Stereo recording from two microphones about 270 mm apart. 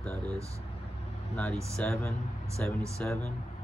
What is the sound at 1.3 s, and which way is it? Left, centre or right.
Speech, centre.